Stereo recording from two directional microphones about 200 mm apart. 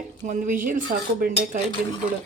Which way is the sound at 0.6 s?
45° right (ahead or behind).